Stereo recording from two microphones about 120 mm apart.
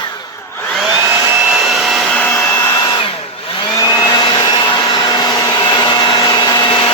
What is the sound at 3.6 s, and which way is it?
Vacuum cleaner, 35° left (ahead or behind).